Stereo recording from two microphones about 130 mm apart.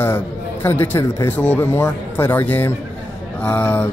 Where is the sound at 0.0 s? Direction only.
15° left (ahead or behind).